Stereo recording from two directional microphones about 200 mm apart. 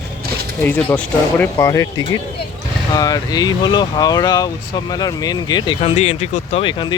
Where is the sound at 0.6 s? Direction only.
10° left (ahead or behind).